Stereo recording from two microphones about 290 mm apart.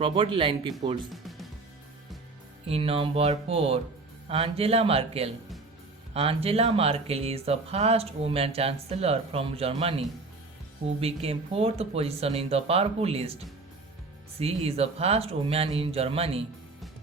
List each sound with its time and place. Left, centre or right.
0.0 s speech: centre
1.1 s music: centre
2.6 s speech: centre
14.3 s speech: right